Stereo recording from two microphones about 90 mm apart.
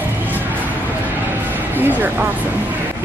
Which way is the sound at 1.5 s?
20° right (ahead or behind).